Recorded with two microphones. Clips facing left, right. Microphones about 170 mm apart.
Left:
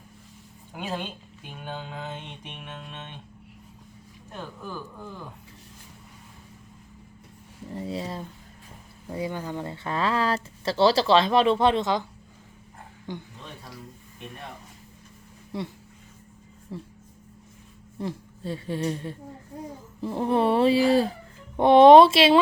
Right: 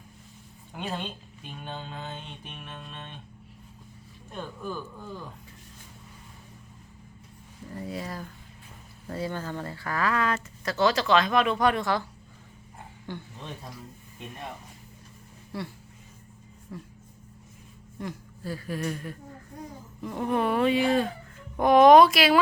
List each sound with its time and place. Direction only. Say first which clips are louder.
0.7 s a woman's voice: left 1 dB; 5° left (ahead or behind)
1.5 s mantra: left 2 dB; 10° left (ahead or behind)
7.7 s speech: left 3 dB; 25° left (ahead or behind)
9.0 s speech: left 1 dB; 15° left (ahead or behind)
13.1 s mantra: left 2 dB; 15° left (ahead or behind)
15.5 s speech: left 3 dB; 20° left (ahead or behind)
16.7 s speech: left 3 dB; 25° left (ahead or behind)
17.9 s a sound: left 4 dB; 30° left (ahead or behind)
20.0 s speech: left 4 dB; 30° left (ahead or behind)